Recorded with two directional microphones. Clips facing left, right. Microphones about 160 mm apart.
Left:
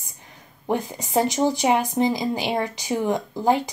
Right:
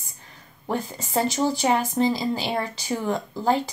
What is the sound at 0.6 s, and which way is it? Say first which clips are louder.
Speech: left 3 dB; 15° left (ahead or behind).